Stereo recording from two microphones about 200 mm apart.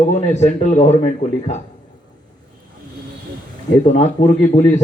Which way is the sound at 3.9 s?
35° left (ahead or behind).